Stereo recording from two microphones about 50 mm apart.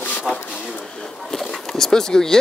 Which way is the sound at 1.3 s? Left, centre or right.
Centre.